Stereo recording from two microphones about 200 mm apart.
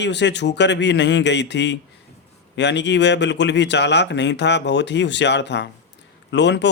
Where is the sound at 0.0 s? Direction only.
60° left (ahead or behind).